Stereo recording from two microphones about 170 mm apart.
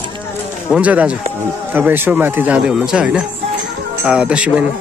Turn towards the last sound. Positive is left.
turn(degrees=-5)  # may be behind; listen again after turning